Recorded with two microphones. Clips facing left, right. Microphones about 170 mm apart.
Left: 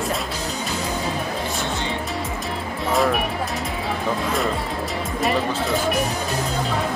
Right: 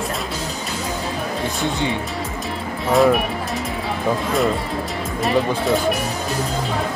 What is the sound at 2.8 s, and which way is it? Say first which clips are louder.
Speech: right 5 dB; centre (ahead or behind).